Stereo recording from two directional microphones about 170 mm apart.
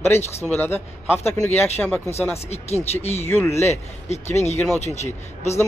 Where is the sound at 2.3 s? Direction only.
40° left (ahead or behind).